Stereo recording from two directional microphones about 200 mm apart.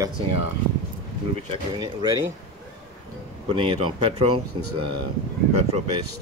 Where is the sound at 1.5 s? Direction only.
20° right (ahead or behind).